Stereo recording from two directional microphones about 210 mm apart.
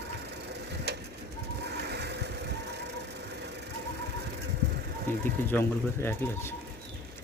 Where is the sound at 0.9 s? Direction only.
50° right (ahead or behind).